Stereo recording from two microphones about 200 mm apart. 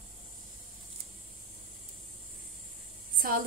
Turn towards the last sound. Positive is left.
turn(degrees=-45)  # may be behind; listen again after turning